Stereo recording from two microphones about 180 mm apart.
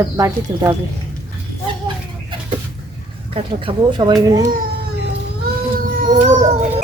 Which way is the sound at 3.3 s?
30° right (ahead or behind).